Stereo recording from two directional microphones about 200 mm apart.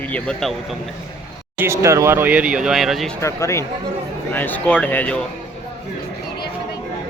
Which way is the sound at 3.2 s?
15° left (ahead or behind).